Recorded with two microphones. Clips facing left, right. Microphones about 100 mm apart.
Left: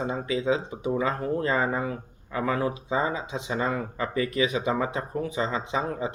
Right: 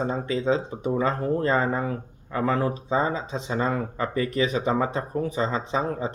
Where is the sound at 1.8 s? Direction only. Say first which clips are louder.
Right 2 dB; 45° right (ahead or behind).